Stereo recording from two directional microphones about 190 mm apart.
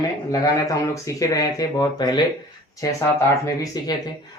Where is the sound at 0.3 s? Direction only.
15° left (ahead or behind).